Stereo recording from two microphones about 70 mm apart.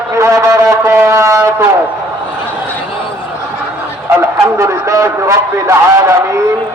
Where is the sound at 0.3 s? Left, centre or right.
Right.